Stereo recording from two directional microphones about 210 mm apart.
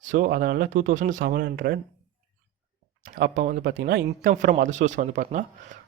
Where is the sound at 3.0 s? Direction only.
40° right (ahead or behind).